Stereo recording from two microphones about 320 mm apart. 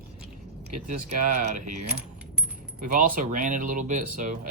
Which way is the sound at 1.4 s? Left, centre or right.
Right.